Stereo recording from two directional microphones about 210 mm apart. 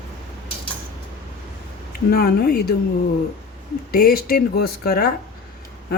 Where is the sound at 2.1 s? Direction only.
45° left (ahead or behind).